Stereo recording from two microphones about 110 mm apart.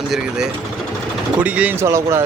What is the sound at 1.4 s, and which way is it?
Speech, 15° right (ahead or behind).